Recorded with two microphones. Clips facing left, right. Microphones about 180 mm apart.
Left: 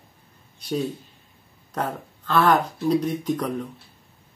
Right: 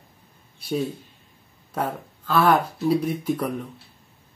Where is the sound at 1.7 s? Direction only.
10° right (ahead or behind).